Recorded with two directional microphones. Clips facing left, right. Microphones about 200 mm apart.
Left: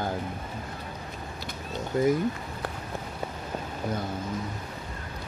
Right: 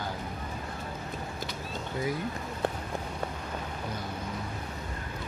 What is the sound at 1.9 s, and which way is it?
Speech, 45° left (ahead or behind).